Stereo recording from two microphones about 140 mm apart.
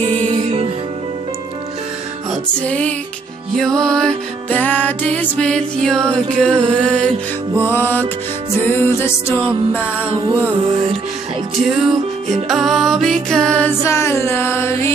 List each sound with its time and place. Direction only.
0.0 s music: 45° right (ahead or behind)
2.4 s music: 10° left (ahead or behind)
9.7 s music: 10° right (ahead or behind)
11.6 s music: centre (ahead or behind)
13.8 s music: 20° left (ahead or behind)